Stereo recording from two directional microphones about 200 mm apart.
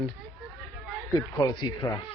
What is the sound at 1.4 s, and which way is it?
Speech, 20° left (ahead or behind).